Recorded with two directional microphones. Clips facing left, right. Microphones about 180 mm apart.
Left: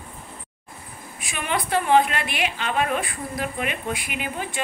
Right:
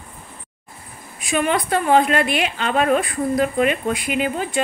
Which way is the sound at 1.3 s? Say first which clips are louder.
Right 5 dB; 45° right (ahead or behind).